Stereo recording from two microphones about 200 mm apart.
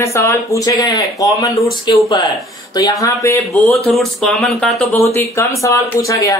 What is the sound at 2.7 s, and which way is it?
Speech, 20° left (ahead or behind).